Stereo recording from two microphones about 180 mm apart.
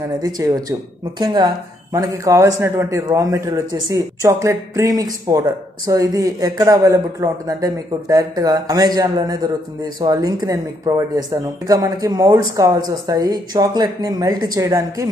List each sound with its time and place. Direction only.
0.0 s speech: 20° right (ahead or behind)